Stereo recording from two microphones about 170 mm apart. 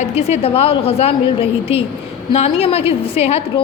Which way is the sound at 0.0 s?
40° left (ahead or behind).